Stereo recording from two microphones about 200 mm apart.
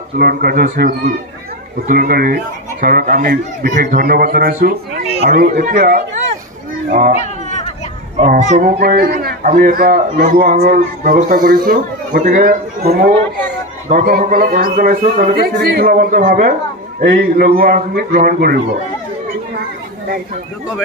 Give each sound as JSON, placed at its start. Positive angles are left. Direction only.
{"t": 0.2, "sound": "speech", "side_deg": -50}
{"t": 7.2, "sound": "a sound", "side_deg": 35}
{"t": 8.3, "sound": "a man's voice", "side_deg": -50}